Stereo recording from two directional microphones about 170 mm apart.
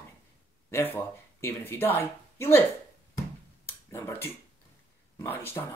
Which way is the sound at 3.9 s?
15° left (ahead or behind).